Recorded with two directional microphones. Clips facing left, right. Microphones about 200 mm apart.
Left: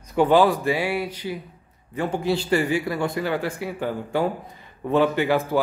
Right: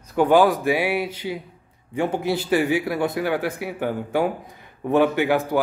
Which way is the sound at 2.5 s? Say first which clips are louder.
Right 4 dB; 5° right (ahead or behind).